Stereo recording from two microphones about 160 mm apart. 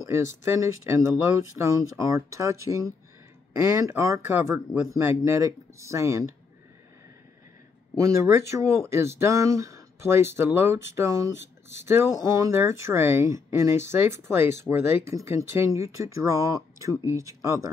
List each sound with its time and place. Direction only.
0.0 s speech: 15° right (ahead or behind)
8.0 s speech: 20° right (ahead or behind)